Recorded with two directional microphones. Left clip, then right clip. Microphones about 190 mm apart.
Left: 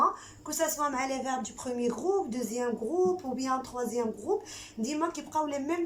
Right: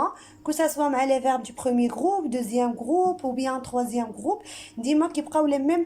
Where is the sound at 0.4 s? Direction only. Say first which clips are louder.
Right 6 dB; 50° right (ahead or behind).